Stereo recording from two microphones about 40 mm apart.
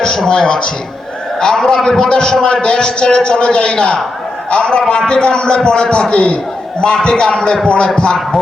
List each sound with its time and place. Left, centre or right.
0.0 s a man's voice: centre